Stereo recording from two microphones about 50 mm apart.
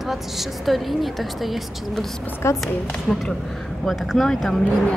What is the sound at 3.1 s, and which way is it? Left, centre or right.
A man's voice, centre.